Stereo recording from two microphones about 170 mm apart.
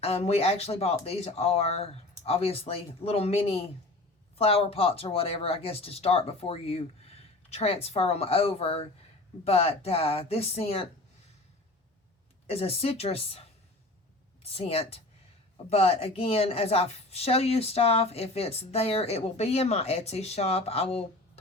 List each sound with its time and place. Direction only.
0.0 s a woman's voice: 35° left (ahead or behind)
12.5 s a woman's voice: 35° left (ahead or behind)
14.4 s a woman's voice: 35° left (ahead or behind)